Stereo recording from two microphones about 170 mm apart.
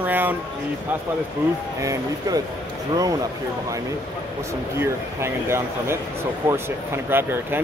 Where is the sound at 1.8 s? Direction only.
20° right (ahead or behind).